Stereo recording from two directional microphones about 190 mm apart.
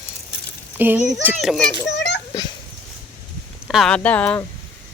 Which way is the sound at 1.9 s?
65° left (ahead or behind).